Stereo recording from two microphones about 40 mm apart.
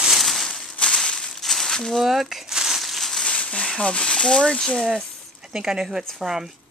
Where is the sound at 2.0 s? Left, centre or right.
Centre.